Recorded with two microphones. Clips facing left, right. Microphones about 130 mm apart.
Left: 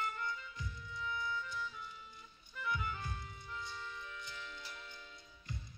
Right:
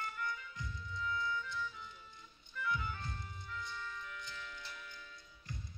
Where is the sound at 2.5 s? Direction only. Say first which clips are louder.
Right 1 dB; 15° left (ahead or behind).